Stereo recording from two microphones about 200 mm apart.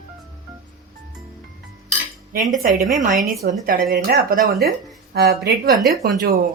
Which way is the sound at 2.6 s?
45° right (ahead or behind).